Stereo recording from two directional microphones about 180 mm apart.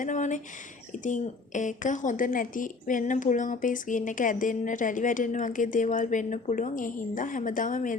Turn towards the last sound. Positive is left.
turn(degrees=45)  # may be behind; listen again after turning